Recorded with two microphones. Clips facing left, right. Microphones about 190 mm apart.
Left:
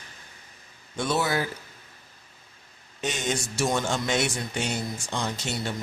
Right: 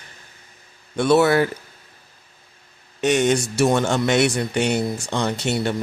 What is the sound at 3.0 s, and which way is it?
Speech, 65° right (ahead or behind).